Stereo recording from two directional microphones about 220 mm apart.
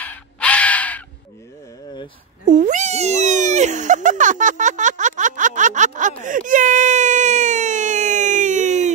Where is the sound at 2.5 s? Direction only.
35° right (ahead or behind).